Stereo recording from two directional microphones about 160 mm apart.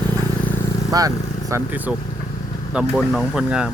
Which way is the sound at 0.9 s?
20° right (ahead or behind).